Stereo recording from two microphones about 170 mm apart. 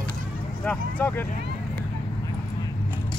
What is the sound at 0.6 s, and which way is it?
Speech, 10° left (ahead or behind).